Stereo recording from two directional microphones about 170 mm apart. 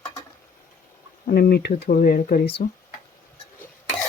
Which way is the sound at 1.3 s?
65° left (ahead or behind).